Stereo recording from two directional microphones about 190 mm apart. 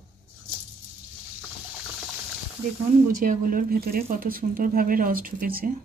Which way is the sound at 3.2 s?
45° right (ahead or behind).